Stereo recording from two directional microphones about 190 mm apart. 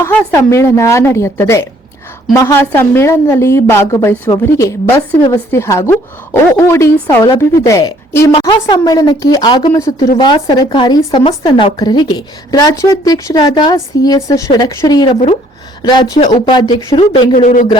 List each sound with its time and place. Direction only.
0.0 s a woman's voice: 10° left (ahead or behind)
17.3 s speech: 40° left (ahead or behind)